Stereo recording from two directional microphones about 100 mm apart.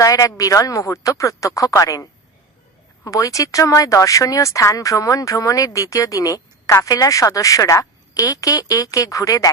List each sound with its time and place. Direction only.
0.0 s speech: 35° left (ahead or behind)